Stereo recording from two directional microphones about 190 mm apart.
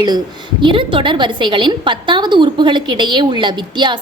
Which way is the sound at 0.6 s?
25° right (ahead or behind).